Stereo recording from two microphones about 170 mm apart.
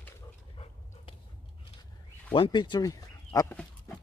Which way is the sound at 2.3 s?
30° left (ahead or behind).